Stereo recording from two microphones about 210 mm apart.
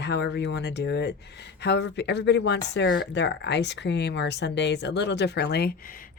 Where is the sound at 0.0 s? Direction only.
55° left (ahead or behind).